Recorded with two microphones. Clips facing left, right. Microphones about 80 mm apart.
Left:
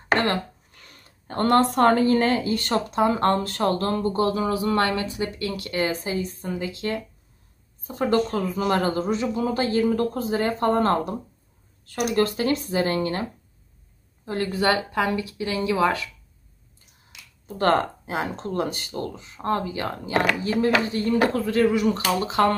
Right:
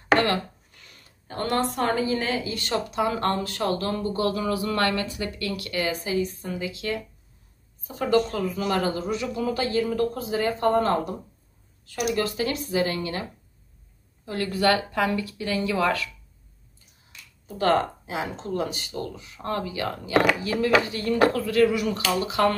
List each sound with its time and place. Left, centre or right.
0.8 s speech: left
14.2 s speech: left
17.6 s speech: left